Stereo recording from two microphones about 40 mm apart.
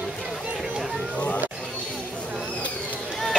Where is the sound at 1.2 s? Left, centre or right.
Left.